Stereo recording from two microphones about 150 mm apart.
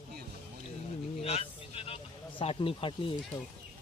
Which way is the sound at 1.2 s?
40° left (ahead or behind).